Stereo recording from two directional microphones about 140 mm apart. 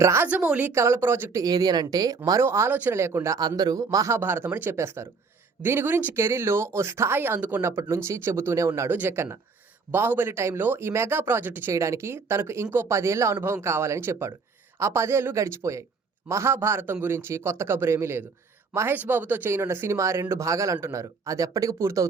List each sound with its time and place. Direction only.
0.0 s a woman's voice: 20° right (ahead or behind)